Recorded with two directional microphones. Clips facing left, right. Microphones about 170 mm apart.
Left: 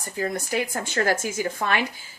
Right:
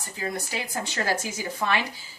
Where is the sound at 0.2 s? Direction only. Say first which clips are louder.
Left 6 dB; 50° left (ahead or behind).